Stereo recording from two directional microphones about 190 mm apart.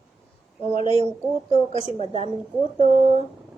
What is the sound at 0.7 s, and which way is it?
Speech, 30° left (ahead or behind).